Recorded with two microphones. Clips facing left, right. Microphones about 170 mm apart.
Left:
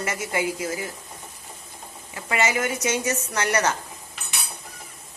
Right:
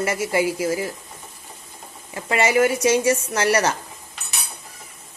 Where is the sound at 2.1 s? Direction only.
35° right (ahead or behind).